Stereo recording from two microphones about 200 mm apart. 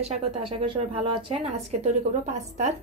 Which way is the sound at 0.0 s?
30° right (ahead or behind).